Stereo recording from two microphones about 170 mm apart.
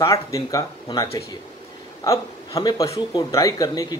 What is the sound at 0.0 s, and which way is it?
A man's voice, 20° left (ahead or behind).